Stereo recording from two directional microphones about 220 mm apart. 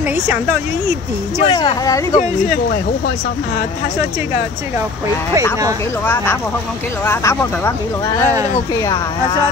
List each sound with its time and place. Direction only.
1.4 s speech: 20° left (ahead or behind)
2.1 s speech: 35° left (ahead or behind)
5.3 s speech: 15° right (ahead or behind)
7.1 s speech: 10° left (ahead or behind)
8.7 s speech: 15° left (ahead or behind)